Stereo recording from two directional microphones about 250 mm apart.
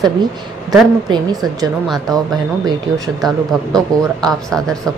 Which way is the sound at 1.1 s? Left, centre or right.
Centre.